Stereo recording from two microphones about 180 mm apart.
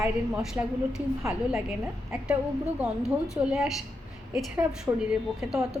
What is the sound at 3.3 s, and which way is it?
A woman's voice, centre (ahead or behind).